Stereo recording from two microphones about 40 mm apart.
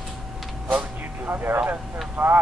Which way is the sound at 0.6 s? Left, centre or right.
Right.